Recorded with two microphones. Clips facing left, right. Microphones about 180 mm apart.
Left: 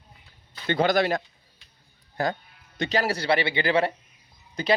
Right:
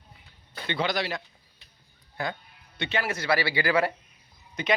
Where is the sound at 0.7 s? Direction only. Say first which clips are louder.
Left 7 dB; 45° left (ahead or behind).